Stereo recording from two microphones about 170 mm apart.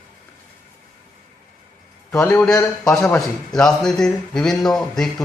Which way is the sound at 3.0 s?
15° left (ahead or behind).